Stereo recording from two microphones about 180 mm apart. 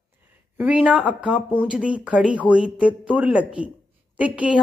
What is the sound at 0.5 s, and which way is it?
A woman's voice, 10° right (ahead or behind).